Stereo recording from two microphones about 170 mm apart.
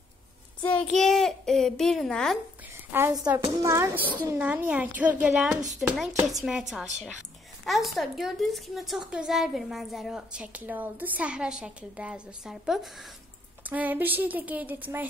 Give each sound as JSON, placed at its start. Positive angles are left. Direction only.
{"t": 0.6, "sound": "a woman's voice", "side_deg": 10}
{"t": 2.9, "sound": "a woman's voice", "side_deg": -15}
{"t": 7.6, "sound": "a woman's voice", "side_deg": 0}